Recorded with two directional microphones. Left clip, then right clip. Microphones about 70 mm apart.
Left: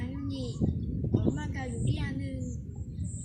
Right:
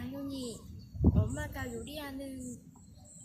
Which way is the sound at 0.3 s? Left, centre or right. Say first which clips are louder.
Left 2 dB; right.